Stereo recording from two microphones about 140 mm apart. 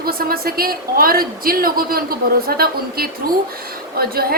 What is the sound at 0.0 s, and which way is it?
A woman's voice, 90° right.